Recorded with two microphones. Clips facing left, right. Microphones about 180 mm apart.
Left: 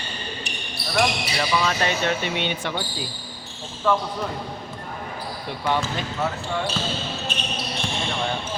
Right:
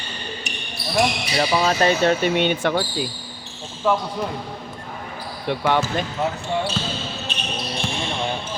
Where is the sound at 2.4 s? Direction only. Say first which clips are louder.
Right 7 dB; 50° right (ahead or behind).